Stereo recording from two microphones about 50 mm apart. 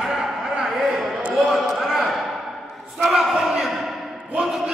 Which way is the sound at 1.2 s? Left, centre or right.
Right.